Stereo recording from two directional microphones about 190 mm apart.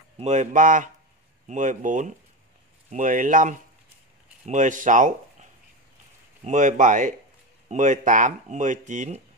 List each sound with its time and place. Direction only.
0.2 s speech: 40° right (ahead or behind)